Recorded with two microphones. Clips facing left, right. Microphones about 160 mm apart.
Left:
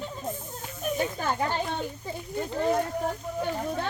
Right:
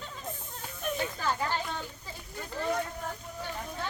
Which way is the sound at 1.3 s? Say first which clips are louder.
Left 1 dB; 25° left (ahead or behind).